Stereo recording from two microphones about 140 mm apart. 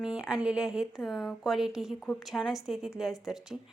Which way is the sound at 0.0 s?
5° right (ahead or behind).